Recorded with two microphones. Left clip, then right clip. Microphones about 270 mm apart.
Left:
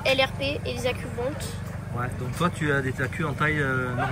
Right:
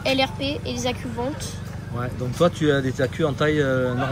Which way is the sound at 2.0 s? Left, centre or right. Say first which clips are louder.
Right 6 dB; centre.